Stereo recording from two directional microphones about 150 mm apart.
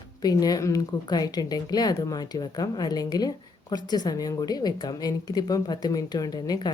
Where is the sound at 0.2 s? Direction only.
25° left (ahead or behind).